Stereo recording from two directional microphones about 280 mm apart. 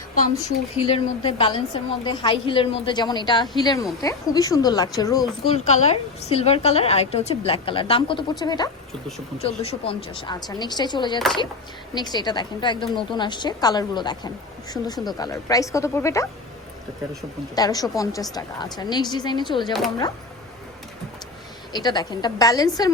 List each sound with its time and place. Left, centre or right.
0.3 s a woman's voice: centre
15.2 s a woman's voice: centre
17.5 s a woman's voice: centre
21.7 s a woman's voice: centre